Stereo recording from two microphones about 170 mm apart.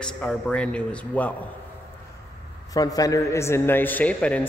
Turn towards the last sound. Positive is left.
turn(degrees=10)  # may be behind; listen again after turning